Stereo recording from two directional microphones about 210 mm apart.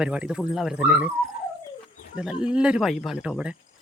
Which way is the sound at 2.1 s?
5° right (ahead or behind).